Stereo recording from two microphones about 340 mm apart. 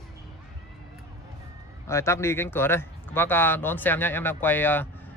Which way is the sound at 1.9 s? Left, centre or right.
Centre.